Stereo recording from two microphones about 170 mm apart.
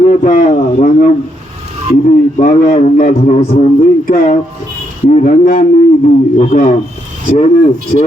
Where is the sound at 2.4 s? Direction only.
50° left (ahead or behind).